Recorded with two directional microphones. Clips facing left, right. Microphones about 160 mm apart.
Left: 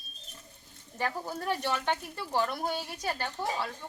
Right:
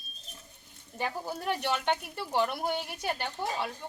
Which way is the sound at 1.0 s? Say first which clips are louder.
Even; 15° right (ahead or behind).